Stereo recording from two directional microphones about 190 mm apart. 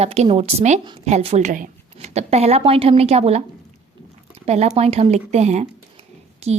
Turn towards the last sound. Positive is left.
turn(degrees=-35)  # may be behind; listen again after turning